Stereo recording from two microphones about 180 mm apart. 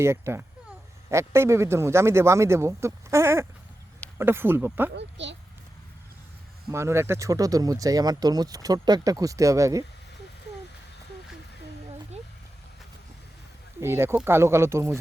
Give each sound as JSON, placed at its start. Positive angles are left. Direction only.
{"t": 0.0, "sound": "speech", "side_deg": -15}
{"t": 4.9, "sound": "speech", "side_deg": -80}
{"t": 6.7, "sound": "speech", "side_deg": -15}
{"t": 13.8, "sound": "speech", "side_deg": -15}